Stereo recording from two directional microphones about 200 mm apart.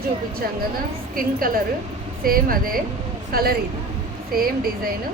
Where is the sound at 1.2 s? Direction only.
45° right (ahead or behind).